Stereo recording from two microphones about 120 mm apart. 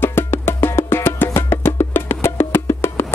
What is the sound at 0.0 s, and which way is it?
Music, 20° left (ahead or behind).